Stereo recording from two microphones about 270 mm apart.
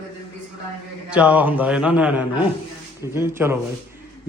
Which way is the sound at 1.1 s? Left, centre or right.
Centre.